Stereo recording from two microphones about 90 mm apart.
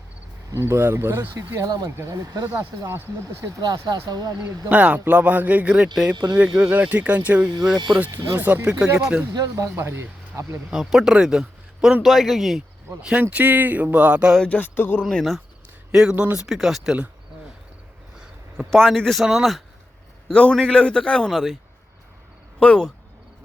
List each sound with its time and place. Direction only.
0.5 s speech: 30° right (ahead or behind)
1.6 s speech: 45° right (ahead or behind)
3.4 s speech: 45° right (ahead or behind)
4.7 s speech: 15° right (ahead or behind)
9.3 s speech: 45° right (ahead or behind)
9.6 s speech: 25° right (ahead or behind)
10.7 s a man's voice: 5° right (ahead or behind)
14.4 s a sound: 20° left (ahead or behind)
15.0 s a man's voice: centre (ahead or behind)
16.5 s a man's voice: centre (ahead or behind)
18.2 s a sound: 10° right (ahead or behind)
18.7 s a man's voice: 5° left (ahead or behind)
20.2 s a man's voice: 10° left (ahead or behind)
22.6 s a man's voice: 10° left (ahead or behind)